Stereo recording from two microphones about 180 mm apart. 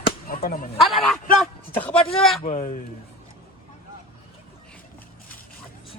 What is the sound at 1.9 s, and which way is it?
Speech, 30° left (ahead or behind).